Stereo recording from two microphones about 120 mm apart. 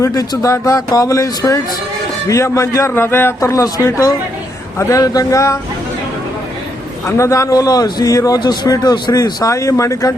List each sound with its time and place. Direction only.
0.0 s a man's voice: 25° left (ahead or behind)
7.2 s a man's voice: 25° left (ahead or behind)